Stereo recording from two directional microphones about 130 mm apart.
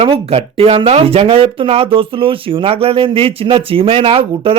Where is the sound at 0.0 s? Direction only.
50° right (ahead or behind).